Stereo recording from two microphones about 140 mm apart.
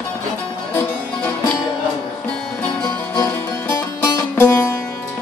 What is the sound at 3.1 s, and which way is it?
Music, 20° left (ahead or behind).